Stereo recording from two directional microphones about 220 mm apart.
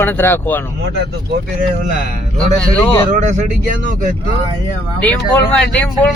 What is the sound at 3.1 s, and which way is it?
Speech, 35° right (ahead or behind).